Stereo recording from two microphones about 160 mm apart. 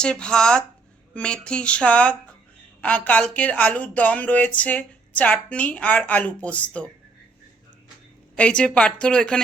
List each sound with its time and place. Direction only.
0.0 s speech: 5° left (ahead or behind)
8.4 s speech: 5° left (ahead or behind)